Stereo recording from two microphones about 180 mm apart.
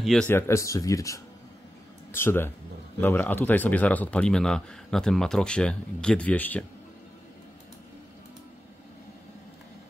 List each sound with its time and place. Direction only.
0.0 s speech: centre (ahead or behind)
0.3 s speech: 15° left (ahead or behind)